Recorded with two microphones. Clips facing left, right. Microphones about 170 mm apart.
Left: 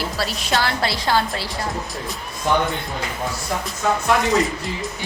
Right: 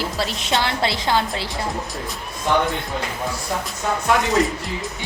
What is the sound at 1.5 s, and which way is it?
Speech, centre (ahead or behind).